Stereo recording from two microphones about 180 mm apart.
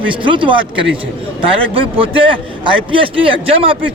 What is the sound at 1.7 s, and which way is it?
A man's voice, 30° right (ahead or behind).